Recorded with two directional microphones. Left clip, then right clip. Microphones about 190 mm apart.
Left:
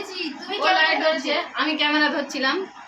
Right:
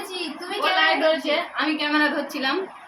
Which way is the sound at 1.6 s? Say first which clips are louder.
Left 1 dB; 35° left (ahead or behind).